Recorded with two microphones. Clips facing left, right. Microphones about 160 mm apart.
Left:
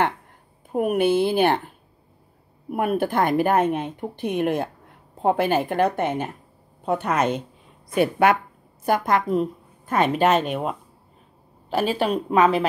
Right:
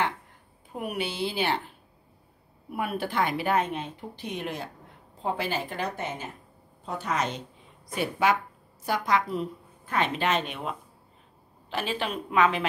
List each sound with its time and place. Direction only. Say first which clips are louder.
0.7 s a woman's voice: left 12 dB; 50° left (ahead or behind)
2.7 s a woman's voice: left 8 dB; 50° left (ahead or behind)